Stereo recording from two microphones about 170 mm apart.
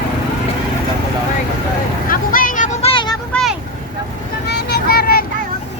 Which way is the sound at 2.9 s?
30° left (ahead or behind).